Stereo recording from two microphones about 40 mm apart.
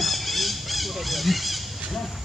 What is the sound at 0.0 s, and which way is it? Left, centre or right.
Squawk, centre.